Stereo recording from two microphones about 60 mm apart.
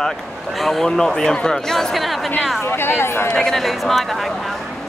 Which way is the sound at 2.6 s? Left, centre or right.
Left.